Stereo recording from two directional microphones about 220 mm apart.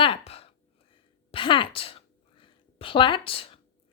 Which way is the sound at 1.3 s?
20° left (ahead or behind).